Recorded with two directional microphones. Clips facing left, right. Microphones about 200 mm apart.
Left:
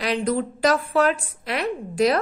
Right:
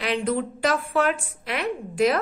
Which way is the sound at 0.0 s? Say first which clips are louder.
Left 2 dB; 40° left (ahead or behind).